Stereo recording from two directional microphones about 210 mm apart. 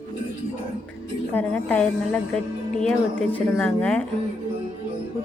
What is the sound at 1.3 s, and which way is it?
A woman's voice, 5° left (ahead or behind).